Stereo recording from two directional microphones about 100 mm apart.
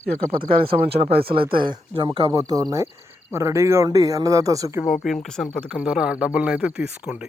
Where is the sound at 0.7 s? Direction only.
70° right (ahead or behind); by 2.1 s 50° right (ahead or behind).